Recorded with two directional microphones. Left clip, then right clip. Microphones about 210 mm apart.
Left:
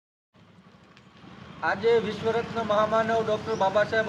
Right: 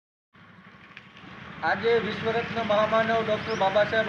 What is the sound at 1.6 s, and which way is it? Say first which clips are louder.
A man's voice: left 1 dB; 20° left (ahead or behind).